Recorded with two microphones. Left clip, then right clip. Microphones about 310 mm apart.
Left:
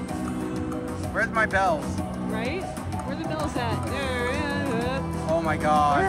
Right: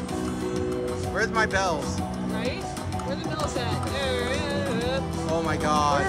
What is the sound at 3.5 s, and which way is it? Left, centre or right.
Music, left.